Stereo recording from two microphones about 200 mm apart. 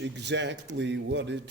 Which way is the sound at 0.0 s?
60° right (ahead or behind).